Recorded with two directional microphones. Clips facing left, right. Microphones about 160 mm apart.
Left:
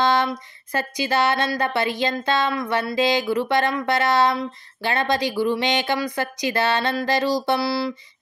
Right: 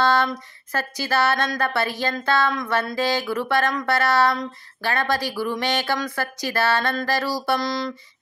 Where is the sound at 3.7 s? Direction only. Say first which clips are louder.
Left 1 dB; 15° left (ahead or behind).